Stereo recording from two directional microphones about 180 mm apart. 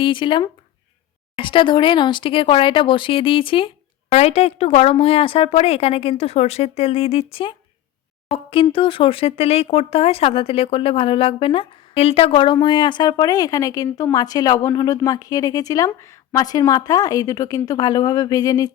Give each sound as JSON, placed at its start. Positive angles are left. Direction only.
{"t": 0.0, "sound": "speech", "side_deg": 30}